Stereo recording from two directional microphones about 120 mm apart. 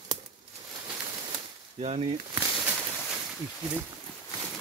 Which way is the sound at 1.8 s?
60° right (ahead or behind).